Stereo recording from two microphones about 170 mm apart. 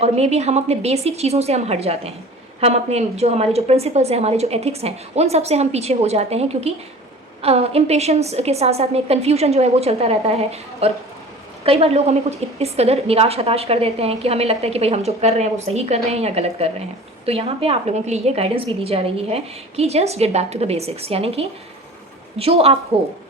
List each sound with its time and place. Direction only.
0.0 s a woman's voice: 40° right (ahead or behind)